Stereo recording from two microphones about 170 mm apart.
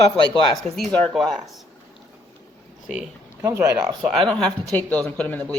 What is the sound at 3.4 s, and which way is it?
Speech, 20° right (ahead or behind).